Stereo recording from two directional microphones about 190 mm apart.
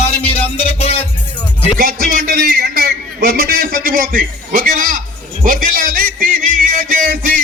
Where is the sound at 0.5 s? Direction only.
30° left (ahead or behind).